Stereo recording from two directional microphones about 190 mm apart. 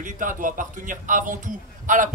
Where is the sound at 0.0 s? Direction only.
45° right (ahead or behind).